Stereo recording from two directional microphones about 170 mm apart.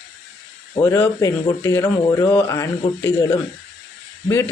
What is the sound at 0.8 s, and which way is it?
Speech, 15° left (ahead or behind).